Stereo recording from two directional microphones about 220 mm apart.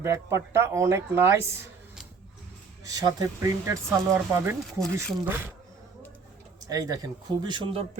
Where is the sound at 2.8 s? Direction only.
15° right (ahead or behind).